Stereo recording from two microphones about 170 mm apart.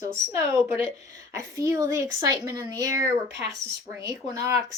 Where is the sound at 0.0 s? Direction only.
15° right (ahead or behind).